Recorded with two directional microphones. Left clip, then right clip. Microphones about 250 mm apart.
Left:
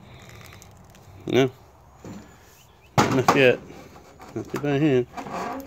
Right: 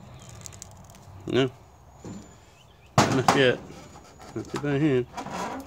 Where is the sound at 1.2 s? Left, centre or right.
Centre.